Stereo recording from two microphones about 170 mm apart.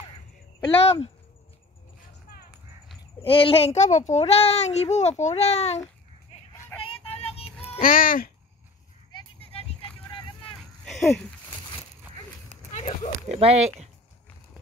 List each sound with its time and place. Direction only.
0.8 s a child's voice: 35° left (ahead or behind)
3.2 s a child's voice: 30° left (ahead or behind)
6.8 s music: 35° left (ahead or behind)
7.8 s speech: 55° left (ahead or behind)
9.1 s a sound: 35° left (ahead or behind)
10.9 s speech: centre (ahead or behind)
12.7 s a sound: 40° left (ahead or behind)
13.3 s speech: 40° right (ahead or behind)